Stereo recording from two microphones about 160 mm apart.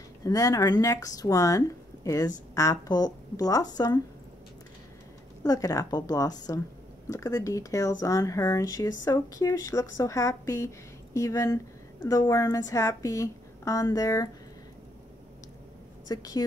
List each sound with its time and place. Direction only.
0.2 s speech: 20° left (ahead or behind)
5.4 s speech: 20° left (ahead or behind)
16.1 s speech: 25° left (ahead or behind)